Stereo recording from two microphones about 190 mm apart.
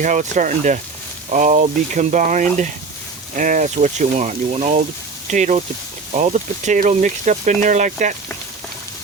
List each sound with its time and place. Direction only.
0.0 s speech: 40° right (ahead or behind)